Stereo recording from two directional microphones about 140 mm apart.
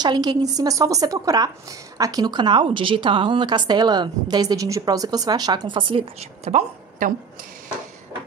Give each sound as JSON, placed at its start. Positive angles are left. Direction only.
{"t": 0.0, "sound": "a woman's voice", "side_deg": -30}